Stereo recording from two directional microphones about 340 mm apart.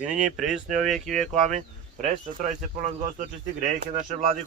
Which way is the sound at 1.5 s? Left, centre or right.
Right.